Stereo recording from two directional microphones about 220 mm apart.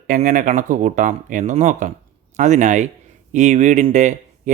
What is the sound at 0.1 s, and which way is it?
Speech, 35° right (ahead or behind).